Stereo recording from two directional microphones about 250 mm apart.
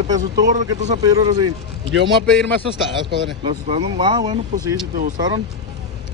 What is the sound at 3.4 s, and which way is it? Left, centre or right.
Speech, right.